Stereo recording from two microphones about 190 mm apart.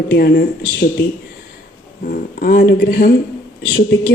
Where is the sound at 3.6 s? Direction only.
75° left (ahead or behind).